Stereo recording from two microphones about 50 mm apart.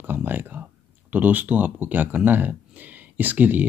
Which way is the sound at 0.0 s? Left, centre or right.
Right.